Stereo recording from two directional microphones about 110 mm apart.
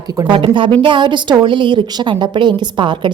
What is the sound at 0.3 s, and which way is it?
A woman's voice, 50° right (ahead or behind).